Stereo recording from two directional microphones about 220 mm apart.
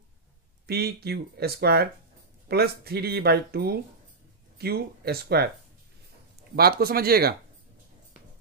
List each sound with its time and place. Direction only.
0.7 s speech: 45° right (ahead or behind)
6.5 s speech: 45° right (ahead or behind)